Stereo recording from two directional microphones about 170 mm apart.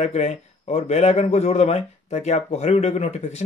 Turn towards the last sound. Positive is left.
turn(degrees=40)  # may be behind; listen again after turning